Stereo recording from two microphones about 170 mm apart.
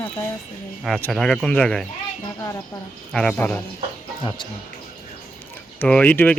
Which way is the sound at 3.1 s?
5° left (ahead or behind).